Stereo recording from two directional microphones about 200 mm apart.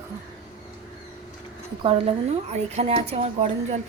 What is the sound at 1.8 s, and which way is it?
A woman's voice, 30° right (ahead or behind).